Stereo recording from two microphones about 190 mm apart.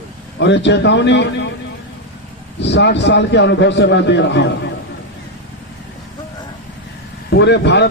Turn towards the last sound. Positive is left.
turn(degrees=65)  # may be behind; listen again after turning